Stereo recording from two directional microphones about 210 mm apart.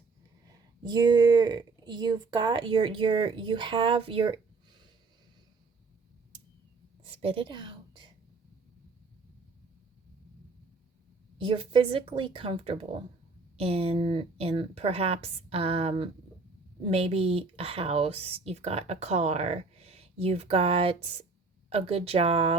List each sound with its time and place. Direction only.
0.4 s speech: 20° right (ahead or behind)
7.2 s a sound: 25° right (ahead or behind)
11.3 s speech: 25° right (ahead or behind)